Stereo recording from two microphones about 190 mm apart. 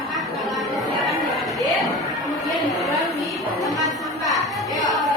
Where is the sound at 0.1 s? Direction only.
Centre (ahead or behind).